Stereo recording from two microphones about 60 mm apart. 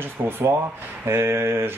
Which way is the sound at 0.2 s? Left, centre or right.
Right.